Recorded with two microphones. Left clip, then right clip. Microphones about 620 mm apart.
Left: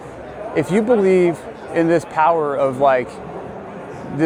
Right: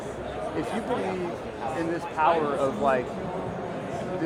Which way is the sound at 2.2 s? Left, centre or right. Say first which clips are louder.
Left 7 dB; left.